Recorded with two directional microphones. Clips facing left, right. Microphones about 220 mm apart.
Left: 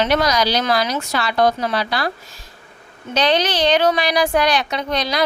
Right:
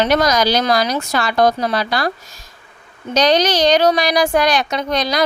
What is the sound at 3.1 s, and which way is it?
A woman's voice, 40° right (ahead or behind).